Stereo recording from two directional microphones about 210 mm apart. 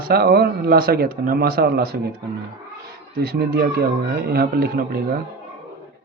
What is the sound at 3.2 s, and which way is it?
Speech, 50° right (ahead or behind).